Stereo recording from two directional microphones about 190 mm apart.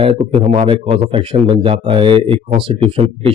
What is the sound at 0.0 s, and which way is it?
Speech, 30° right (ahead or behind).